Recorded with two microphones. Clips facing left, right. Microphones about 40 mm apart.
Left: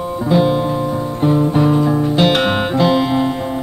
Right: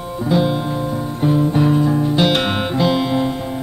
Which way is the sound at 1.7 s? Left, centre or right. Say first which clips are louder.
Left 1 dB; centre.